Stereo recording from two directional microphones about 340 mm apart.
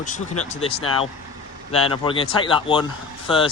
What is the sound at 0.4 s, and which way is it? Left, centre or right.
Speech, centre.